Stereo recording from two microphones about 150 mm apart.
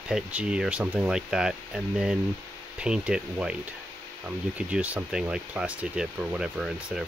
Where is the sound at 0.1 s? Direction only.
10° right (ahead or behind).